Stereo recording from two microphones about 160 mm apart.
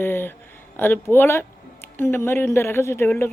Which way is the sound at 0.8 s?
15° left (ahead or behind).